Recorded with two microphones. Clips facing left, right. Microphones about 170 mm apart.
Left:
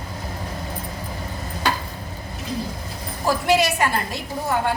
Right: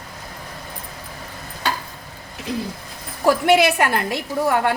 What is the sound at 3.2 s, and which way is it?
A woman's voice, 60° right (ahead or behind).